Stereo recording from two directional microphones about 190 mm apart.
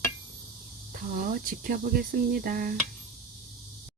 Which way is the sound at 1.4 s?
50° right (ahead or behind).